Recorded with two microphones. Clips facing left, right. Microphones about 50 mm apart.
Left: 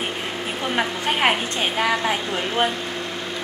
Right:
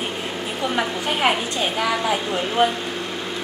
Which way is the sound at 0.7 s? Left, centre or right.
Centre.